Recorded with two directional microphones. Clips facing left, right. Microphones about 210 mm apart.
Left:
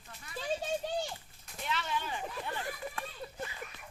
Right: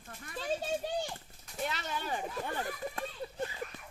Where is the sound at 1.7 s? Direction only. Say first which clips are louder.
Left 2 dB; 40° right (ahead or behind).